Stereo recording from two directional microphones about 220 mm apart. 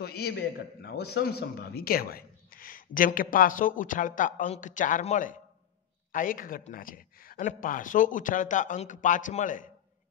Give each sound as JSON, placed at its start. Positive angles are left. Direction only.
{"t": 0.0, "sound": "a man's voice", "side_deg": 45}